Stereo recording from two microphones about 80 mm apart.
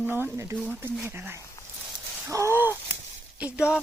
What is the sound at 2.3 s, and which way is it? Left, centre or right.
Speech, right.